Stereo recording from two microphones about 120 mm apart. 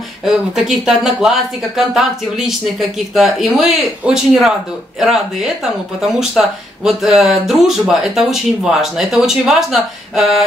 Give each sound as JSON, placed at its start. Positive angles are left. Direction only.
{"t": 0.2, "sound": "speech", "side_deg": 0}